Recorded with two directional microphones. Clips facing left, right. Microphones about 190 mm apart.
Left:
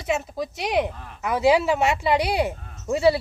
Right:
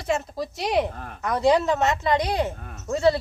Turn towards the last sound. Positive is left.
turn(degrees=10)  # may be behind; listen again after turning